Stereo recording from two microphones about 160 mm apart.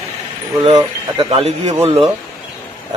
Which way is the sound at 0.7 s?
35° right (ahead or behind).